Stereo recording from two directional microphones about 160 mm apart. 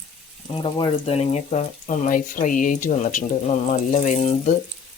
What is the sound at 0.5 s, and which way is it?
Speech, 35° left (ahead or behind).